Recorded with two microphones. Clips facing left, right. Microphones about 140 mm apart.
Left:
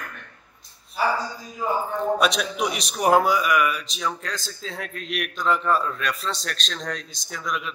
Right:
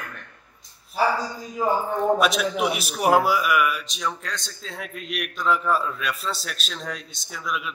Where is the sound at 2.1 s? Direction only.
Centre (ahead or behind).